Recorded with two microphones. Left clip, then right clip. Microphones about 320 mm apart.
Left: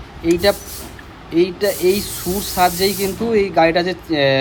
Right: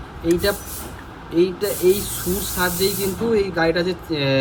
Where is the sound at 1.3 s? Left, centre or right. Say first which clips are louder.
Left 3 dB; left.